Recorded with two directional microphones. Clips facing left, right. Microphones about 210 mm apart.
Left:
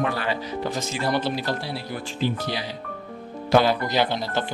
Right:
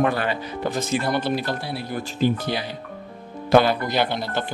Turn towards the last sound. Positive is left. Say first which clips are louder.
# even
turn(degrees=-55)  # may be behind; listen again after turning